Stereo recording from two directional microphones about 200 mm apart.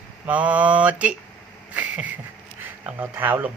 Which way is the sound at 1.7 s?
5° right (ahead or behind).